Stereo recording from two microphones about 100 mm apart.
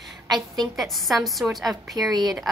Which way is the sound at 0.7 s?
Centre (ahead or behind).